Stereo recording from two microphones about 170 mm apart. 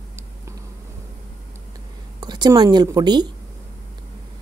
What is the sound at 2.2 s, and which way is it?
Speech, 25° right (ahead or behind).